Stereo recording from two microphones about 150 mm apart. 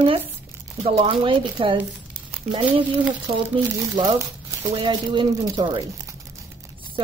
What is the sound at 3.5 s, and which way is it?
Speech, 30° right (ahead or behind).